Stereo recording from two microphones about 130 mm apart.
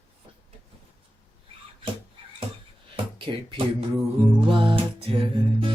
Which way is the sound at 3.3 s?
45° right (ahead or behind).